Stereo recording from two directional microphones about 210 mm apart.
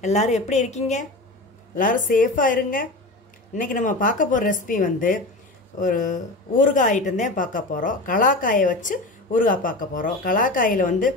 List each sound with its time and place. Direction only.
0.0 s a woman's voice: 35° left (ahead or behind)